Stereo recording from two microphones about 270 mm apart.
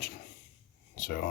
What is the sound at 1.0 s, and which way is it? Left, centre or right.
Speech, left.